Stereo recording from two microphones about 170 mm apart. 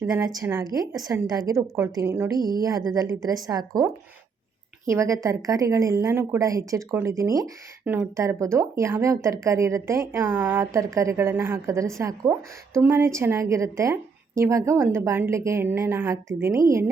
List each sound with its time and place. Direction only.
0.3 s a woman's voice: 15° right (ahead or behind)